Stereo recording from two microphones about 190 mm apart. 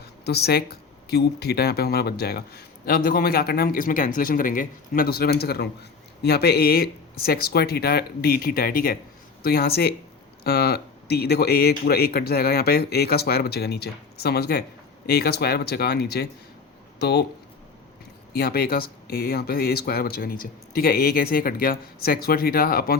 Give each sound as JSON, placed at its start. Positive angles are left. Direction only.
{"t": 0.0, "sound": "speech", "side_deg": 60}
{"t": 18.3, "sound": "speech", "side_deg": 55}